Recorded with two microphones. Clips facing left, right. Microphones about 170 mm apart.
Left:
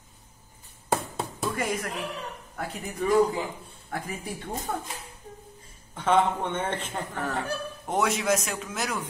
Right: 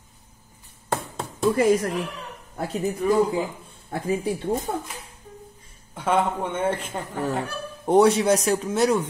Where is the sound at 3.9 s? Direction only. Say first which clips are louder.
Right 9 dB; 30° right (ahead or behind).